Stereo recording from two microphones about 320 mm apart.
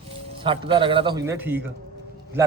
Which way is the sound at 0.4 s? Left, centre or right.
Centre.